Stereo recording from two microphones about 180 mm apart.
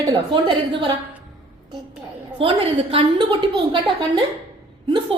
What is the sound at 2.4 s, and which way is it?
A woman's voice, 30° right (ahead or behind).